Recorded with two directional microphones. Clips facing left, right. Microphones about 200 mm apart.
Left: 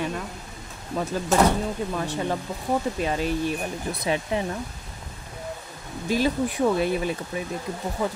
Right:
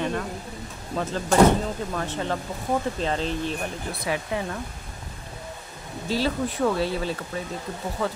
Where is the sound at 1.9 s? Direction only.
15° left (ahead or behind).